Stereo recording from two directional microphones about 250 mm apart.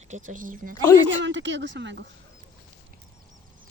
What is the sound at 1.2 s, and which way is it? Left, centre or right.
Speech, right.